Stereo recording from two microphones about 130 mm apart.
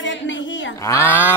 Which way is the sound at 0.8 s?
20° left (ahead or behind).